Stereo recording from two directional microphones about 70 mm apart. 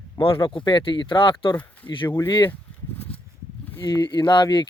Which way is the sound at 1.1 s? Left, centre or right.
Left.